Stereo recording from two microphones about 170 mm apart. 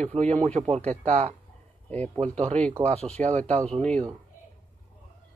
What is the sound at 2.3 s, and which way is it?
Speech, 40° right (ahead or behind).